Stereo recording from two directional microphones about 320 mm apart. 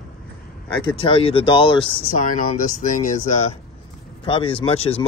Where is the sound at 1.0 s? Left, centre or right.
Centre.